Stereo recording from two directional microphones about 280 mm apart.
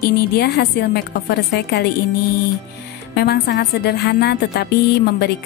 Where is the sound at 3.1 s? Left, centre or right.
Left.